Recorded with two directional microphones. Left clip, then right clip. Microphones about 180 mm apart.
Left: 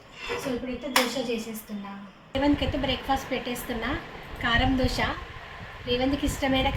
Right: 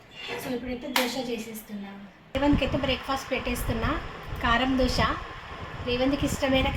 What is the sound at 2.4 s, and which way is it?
A woman's voice, 10° right (ahead or behind).